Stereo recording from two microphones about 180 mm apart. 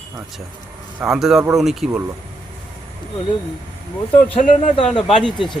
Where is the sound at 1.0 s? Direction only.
5° right (ahead or behind).